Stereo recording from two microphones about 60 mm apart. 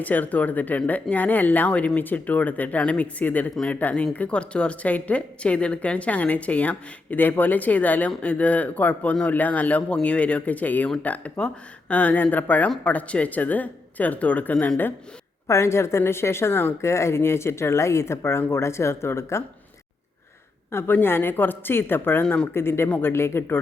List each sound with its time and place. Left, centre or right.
0.0 s a woman's voice: left
15.4 s a woman's voice: left
20.7 s speech: left